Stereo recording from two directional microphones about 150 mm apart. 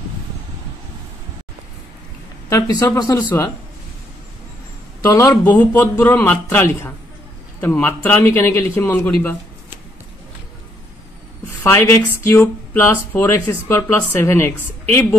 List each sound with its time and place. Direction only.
2.5 s speech: 20° left (ahead or behind)
5.0 s speech: 20° left (ahead or behind)
11.6 s speech: 15° left (ahead or behind)